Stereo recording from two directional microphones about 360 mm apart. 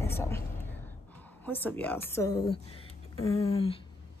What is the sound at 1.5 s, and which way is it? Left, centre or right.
Speech, centre.